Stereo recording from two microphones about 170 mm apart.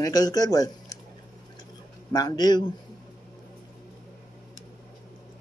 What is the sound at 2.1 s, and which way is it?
Speech, 25° left (ahead or behind).